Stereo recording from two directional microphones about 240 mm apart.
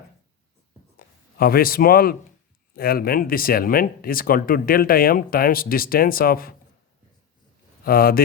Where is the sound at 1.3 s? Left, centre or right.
Left.